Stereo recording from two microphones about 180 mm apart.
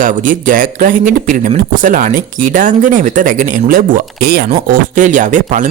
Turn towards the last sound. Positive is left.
turn(degrees=-45)  # may be behind; listen again after turning